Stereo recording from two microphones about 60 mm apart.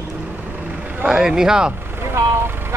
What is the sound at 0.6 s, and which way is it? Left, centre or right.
Vehicle, right.